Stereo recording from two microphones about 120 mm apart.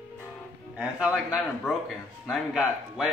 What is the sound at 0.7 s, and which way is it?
A man's voice, 10° right (ahead or behind).